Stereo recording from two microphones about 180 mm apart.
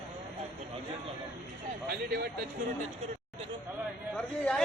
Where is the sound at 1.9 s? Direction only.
60° right (ahead or behind).